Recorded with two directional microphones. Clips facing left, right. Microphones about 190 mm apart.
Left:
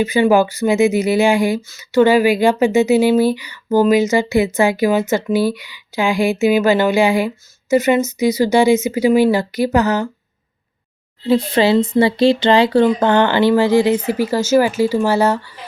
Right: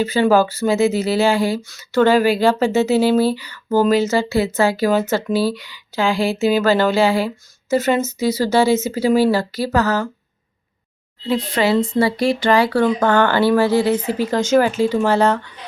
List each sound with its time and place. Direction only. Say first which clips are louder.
0.0 s speech: left 2 dB; 15° left (ahead or behind)
11.3 s speech: left 4 dB; 25° left (ahead or behind); by 15.5 s 10° left (ahead or behind)